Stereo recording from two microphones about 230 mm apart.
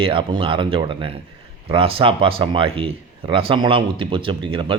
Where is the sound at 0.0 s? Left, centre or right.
Right.